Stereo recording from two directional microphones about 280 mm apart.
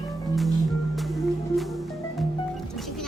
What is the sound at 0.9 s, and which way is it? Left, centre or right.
Music, centre.